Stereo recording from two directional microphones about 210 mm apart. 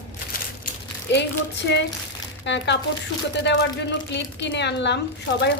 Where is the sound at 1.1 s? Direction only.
55° left (ahead or behind).